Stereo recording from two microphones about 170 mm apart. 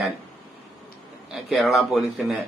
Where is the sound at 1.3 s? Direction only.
Centre (ahead or behind).